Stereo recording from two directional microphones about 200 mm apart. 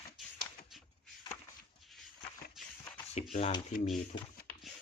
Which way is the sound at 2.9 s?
30° left (ahead or behind).